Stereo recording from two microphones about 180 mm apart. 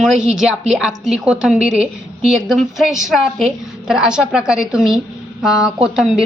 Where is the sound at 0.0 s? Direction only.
5° right (ahead or behind).